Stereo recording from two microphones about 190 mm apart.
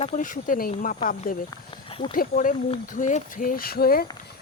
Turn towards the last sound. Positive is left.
turn(degrees=55)  # may be behind; listen again after turning